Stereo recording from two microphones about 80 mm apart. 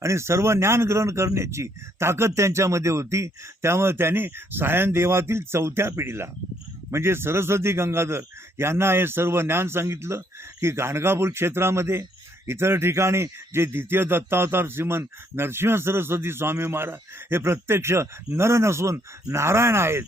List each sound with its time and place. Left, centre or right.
0.0 s speech: right